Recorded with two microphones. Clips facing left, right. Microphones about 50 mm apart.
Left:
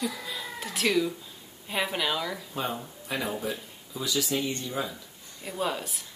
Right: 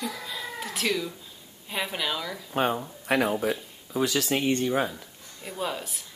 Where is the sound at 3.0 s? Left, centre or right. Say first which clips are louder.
Right 7 dB; right.